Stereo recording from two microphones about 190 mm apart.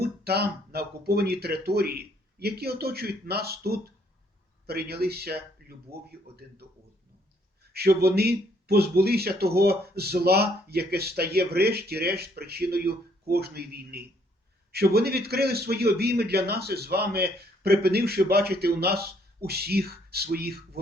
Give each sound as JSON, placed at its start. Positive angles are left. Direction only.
{"t": 0.0, "sound": "a man's voice", "side_deg": -55}
{"t": 7.7, "sound": "a man's voice", "side_deg": -55}